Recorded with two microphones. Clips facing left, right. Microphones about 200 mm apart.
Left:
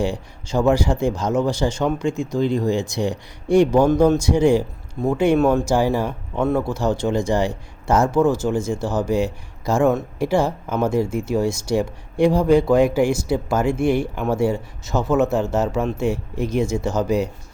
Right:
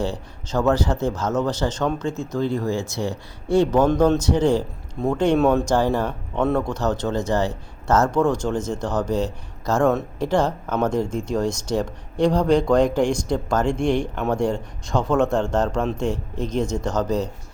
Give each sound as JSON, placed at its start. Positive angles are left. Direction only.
{"t": 0.0, "sound": "speech", "side_deg": 10}